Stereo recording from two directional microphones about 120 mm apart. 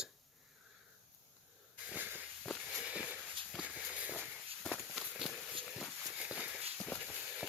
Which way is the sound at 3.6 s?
5° right (ahead or behind).